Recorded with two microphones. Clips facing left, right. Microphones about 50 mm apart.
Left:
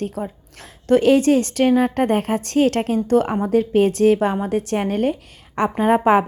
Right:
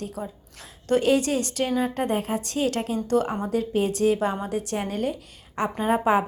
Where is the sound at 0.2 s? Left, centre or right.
Left.